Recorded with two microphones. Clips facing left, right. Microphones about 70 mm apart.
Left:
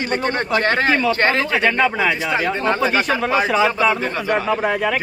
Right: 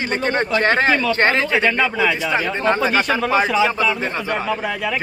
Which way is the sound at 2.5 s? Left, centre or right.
Right.